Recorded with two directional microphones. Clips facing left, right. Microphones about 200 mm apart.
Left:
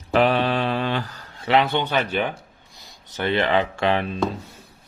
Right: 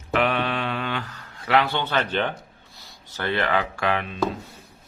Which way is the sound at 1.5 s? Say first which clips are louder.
Left 2 dB; 20° left (ahead or behind).